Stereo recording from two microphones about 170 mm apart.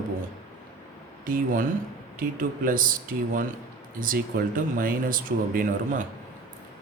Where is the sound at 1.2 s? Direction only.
55° right (ahead or behind).